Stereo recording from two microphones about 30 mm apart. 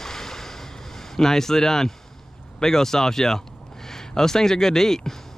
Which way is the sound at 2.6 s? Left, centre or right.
Centre.